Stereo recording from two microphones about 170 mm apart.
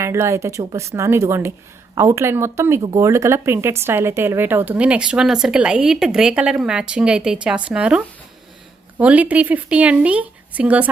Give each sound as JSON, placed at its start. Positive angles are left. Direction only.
{"t": 0.0, "sound": "speech", "side_deg": -15}